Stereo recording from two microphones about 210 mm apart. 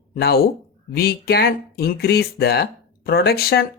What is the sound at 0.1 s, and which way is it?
Speech, 45° left (ahead or behind).